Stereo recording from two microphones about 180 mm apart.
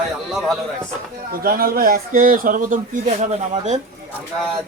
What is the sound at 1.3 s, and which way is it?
Speech, 55° right (ahead or behind).